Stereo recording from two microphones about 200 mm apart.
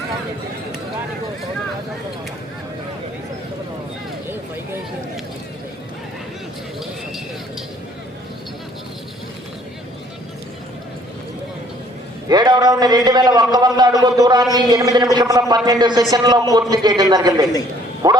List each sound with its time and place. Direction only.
12.3 s a man's voice: 20° right (ahead or behind)